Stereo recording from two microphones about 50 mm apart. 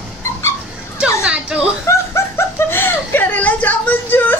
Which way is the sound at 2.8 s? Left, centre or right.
Left.